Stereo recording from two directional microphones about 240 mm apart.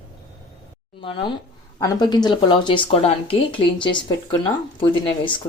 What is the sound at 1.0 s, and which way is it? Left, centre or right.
Speech, left.